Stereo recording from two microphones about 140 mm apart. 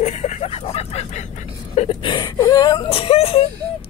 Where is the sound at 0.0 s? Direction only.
55° left (ahead or behind).